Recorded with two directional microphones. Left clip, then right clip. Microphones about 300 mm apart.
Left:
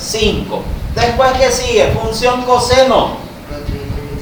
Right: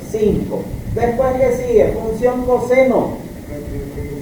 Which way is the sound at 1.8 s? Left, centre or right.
Centre.